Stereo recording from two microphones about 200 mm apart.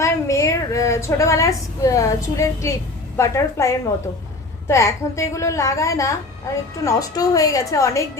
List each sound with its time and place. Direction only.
0.0 s a woman's voice: 15° left (ahead or behind)